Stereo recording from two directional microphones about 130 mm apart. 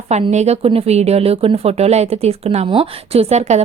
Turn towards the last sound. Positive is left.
turn(degrees=-60)  # may be behind; listen again after turning